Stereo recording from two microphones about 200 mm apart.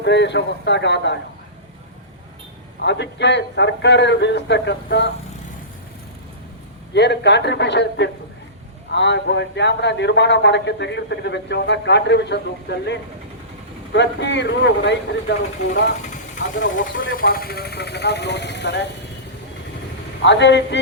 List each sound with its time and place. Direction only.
0.0 s a man's voice: 60° left (ahead or behind)
2.8 s a man's voice: 60° left (ahead or behind)
6.9 s a man's voice: 60° left (ahead or behind)
17.2 s a man's voice: 45° left (ahead or behind)
20.2 s a man's voice: 60° left (ahead or behind)